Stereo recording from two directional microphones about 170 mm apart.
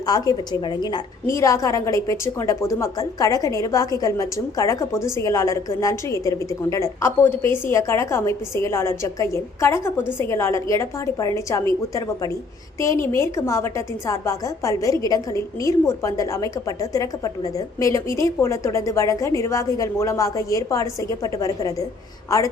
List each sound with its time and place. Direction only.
0.0 s a woman's voice: 20° left (ahead or behind)